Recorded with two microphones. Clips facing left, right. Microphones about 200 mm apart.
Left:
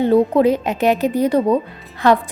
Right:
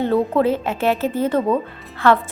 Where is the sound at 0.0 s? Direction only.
15° left (ahead or behind).